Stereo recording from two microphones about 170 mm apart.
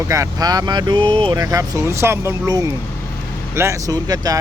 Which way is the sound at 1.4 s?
20° right (ahead or behind).